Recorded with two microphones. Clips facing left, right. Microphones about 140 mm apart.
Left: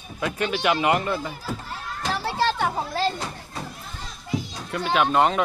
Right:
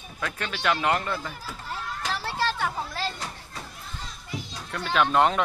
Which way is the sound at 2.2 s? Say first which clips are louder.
Left 5 dB; 30° left (ahead or behind).